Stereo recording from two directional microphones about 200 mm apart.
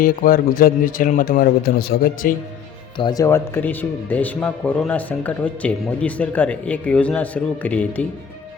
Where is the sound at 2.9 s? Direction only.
20° left (ahead or behind).